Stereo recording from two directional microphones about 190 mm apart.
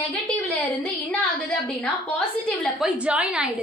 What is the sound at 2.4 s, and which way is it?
Speech, 5° left (ahead or behind).